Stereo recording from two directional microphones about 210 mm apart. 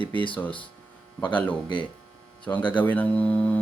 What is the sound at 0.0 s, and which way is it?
Speech, 5° left (ahead or behind).